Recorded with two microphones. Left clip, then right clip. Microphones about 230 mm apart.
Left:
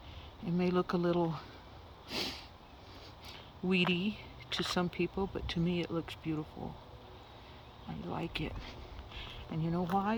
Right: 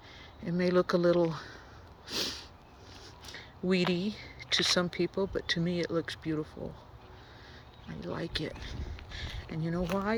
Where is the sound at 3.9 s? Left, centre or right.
Centre.